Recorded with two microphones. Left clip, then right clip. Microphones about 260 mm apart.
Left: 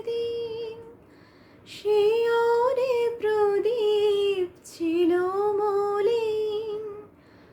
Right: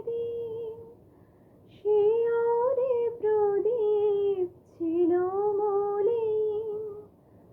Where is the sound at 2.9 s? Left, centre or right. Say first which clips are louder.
Left 2 dB; left.